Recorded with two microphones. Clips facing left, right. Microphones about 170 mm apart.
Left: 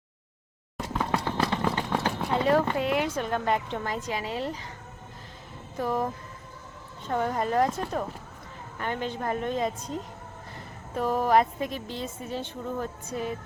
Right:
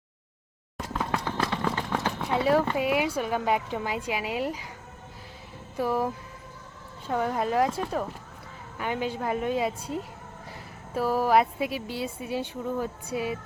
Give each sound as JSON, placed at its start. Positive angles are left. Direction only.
{"t": 0.8, "sound": "music", "side_deg": 0}
{"t": 1.4, "sound": "run", "side_deg": 15}
{"t": 2.2, "sound": "a woman's voice", "side_deg": -5}
{"t": 5.7, "sound": "a woman's voice", "side_deg": -10}